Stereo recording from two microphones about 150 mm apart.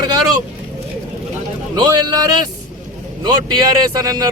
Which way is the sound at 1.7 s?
25° right (ahead or behind).